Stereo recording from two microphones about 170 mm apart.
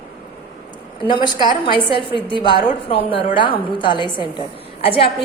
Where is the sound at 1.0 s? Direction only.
25° left (ahead or behind).